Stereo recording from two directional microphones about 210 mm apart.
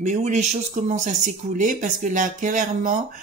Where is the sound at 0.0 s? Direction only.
35° right (ahead or behind).